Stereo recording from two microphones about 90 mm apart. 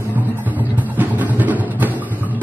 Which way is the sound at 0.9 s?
20° right (ahead or behind).